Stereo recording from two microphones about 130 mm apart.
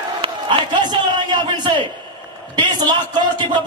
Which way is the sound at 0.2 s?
40° right (ahead or behind).